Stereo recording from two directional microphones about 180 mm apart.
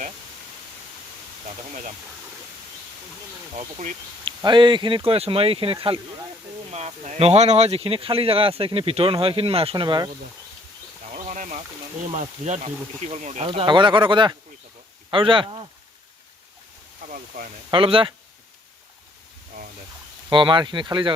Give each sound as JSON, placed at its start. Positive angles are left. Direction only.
{"t": 1.5, "sound": "speech", "side_deg": -40}
{"t": 3.5, "sound": "speech", "side_deg": -40}
{"t": 4.3, "sound": "speech", "side_deg": -25}
{"t": 11.1, "sound": "a sound", "side_deg": -45}
{"t": 12.1, "sound": "speech", "side_deg": -40}
{"t": 13.5, "sound": "speech", "side_deg": -25}
{"t": 17.1, "sound": "speech", "side_deg": -50}
{"t": 17.7, "sound": "speech", "side_deg": -30}
{"t": 20.3, "sound": "speech", "side_deg": -25}